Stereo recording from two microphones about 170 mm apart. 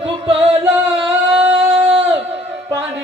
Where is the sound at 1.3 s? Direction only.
10° right (ahead or behind).